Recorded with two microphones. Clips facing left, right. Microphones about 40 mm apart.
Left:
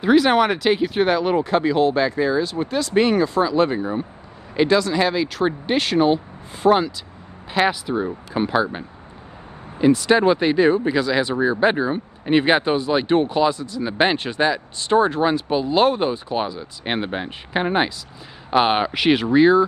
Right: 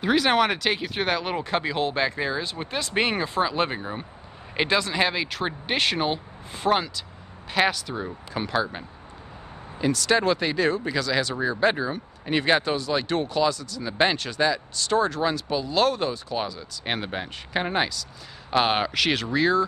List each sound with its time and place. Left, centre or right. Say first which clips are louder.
0.0 s speech: left 5 dB; centre
7.7 s speech: left 8 dB; centre